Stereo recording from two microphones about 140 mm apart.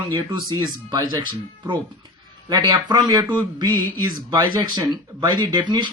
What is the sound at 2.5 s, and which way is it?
Speech, 30° right (ahead or behind).